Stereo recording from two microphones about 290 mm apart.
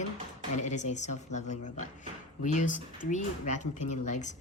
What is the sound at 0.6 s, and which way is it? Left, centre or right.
A woman's voice, left.